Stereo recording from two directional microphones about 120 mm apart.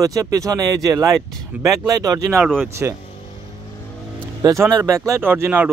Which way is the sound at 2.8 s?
20° right (ahead or behind).